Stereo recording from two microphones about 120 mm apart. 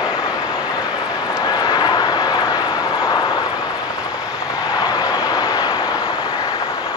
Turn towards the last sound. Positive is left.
turn(degrees=30)  # may be behind; listen again after turning